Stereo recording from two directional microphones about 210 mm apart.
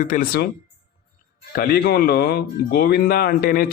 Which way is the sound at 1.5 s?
45° left (ahead or behind).